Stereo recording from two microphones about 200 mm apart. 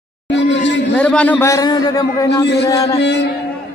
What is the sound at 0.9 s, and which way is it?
A man's voice, 5° left (ahead or behind).